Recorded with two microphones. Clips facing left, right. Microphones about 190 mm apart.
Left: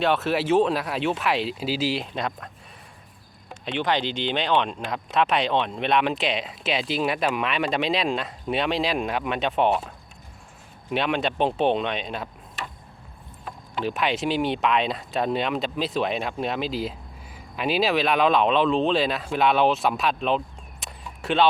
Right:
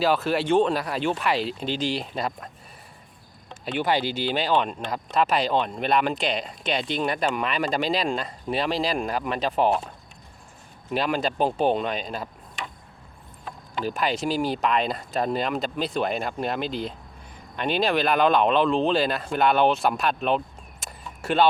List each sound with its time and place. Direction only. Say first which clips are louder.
0.0 s speech: even; centre (ahead or behind)
3.7 s speech: right 1 dB; 5° right (ahead or behind)
10.9 s speech: even; centre (ahead or behind)